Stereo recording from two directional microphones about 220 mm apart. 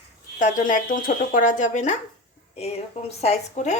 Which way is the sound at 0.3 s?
35° left (ahead or behind).